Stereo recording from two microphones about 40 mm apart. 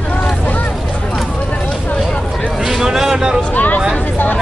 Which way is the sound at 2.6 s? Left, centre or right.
Centre.